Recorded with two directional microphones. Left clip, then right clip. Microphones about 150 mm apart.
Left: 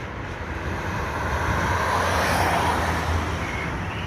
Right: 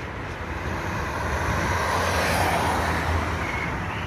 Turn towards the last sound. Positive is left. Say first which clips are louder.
# left 1 dB
turn(degrees=-90)